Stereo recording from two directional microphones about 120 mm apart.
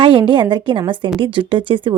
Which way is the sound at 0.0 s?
45° right (ahead or behind).